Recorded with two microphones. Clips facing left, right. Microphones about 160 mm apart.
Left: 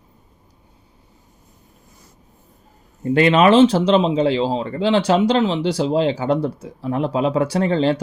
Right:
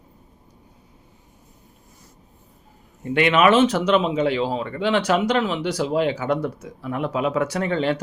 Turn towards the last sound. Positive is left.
turn(degrees=30)  # may be behind; listen again after turning